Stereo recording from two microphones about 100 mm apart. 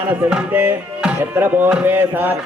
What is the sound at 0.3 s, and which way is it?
Music, 15° right (ahead or behind).